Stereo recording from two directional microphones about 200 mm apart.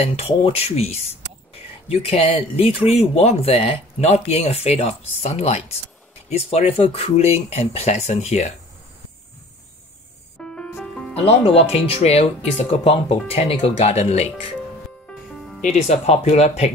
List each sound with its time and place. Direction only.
0.0 s speech: 30° left (ahead or behind)
10.4 s music: 5° left (ahead or behind)
11.1 s speech: 30° left (ahead or behind)
15.0 s music: 5° left (ahead or behind)
15.9 s speech: 35° left (ahead or behind)